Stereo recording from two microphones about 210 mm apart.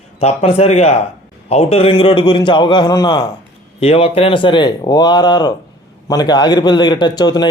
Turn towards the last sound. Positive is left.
turn(degrees=20)  # may be behind; listen again after turning